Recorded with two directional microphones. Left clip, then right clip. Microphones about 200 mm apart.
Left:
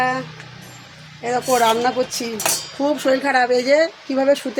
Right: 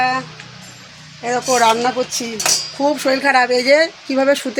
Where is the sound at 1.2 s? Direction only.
5° right (ahead or behind).